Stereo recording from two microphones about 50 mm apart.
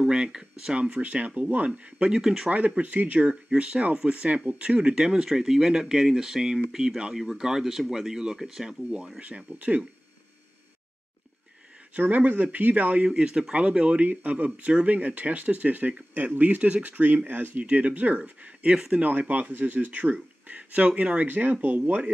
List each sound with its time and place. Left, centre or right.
0.0 s speech: centre
0.7 s speech: right
2.1 s speech: centre
2.8 s speech: right
4.9 s speech: centre
9.2 s speech: right
11.9 s speech: right
13.1 s speech: centre; by 17.6 s right
17.6 s speech: right
21.3 s speech: right